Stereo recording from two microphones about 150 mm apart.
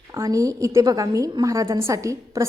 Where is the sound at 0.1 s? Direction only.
20° right (ahead or behind).